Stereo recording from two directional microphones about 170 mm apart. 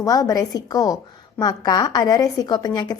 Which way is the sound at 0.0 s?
20° left (ahead or behind).